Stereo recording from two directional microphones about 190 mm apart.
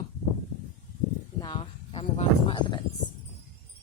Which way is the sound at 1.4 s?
25° left (ahead or behind).